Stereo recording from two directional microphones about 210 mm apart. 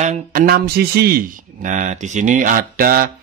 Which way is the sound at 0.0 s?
35° right (ahead or behind).